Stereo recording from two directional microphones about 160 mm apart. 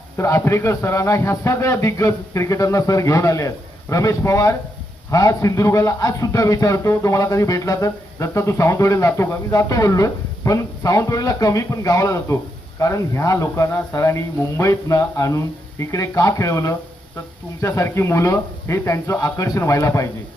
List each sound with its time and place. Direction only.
0.2 s a man's voice: 20° left (ahead or behind)